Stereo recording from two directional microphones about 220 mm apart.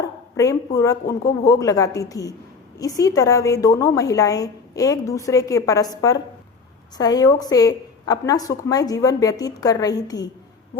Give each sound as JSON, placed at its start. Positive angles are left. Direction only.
{"t": 0.3, "sound": "a woman's voice", "side_deg": 15}